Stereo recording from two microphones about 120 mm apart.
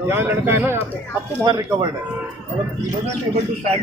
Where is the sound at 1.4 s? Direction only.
35° right (ahead or behind).